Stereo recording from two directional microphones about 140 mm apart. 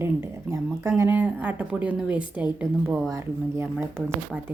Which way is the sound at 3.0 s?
20° right (ahead or behind).